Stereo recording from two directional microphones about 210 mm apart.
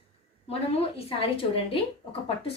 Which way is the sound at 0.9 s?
25° left (ahead or behind).